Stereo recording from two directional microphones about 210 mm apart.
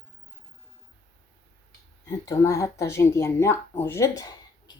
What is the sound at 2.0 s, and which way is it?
Speech, 15° left (ahead or behind).